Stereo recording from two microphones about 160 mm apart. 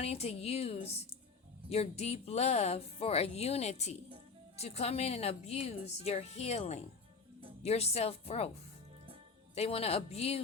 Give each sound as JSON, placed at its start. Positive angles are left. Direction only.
{"t": 0.0, "sound": "speech", "side_deg": 40}
{"t": 9.6, "sound": "speech", "side_deg": 40}